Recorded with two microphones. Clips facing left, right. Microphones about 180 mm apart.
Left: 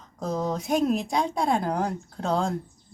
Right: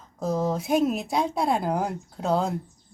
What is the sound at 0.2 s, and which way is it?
Speech, 5° right (ahead or behind).